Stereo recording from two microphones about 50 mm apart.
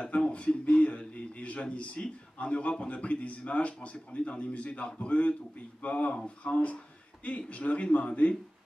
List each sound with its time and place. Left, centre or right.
0.3 s a man's voice: left